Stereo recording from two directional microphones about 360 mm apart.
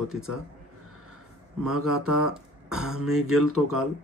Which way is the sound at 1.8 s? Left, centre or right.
Right.